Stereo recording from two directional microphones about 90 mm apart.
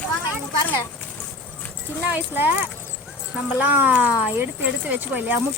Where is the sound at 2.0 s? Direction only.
20° right (ahead or behind).